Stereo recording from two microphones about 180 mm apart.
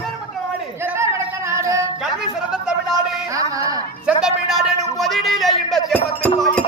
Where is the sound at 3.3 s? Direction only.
20° right (ahead or behind).